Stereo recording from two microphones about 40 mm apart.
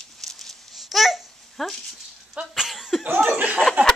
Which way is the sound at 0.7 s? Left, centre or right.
Centre.